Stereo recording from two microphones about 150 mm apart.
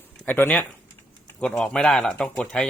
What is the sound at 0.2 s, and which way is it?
A man's voice, 10° left (ahead or behind).